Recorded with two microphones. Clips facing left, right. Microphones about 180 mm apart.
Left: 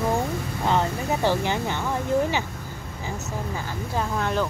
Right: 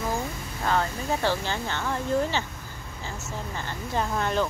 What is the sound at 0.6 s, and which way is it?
Speech, 20° left (ahead or behind).